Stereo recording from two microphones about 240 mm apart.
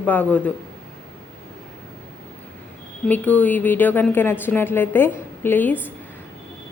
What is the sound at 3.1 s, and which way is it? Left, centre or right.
Speech, centre.